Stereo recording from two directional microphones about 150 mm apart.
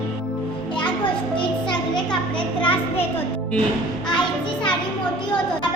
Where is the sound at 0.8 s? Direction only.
35° left (ahead or behind).